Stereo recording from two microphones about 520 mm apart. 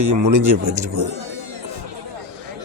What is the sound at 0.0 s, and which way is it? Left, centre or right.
Speech, right.